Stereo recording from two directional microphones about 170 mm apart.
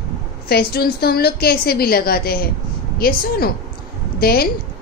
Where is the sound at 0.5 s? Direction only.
65° left (ahead or behind).